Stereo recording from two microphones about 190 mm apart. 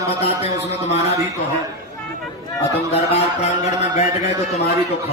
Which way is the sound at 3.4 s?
35° left (ahead or behind).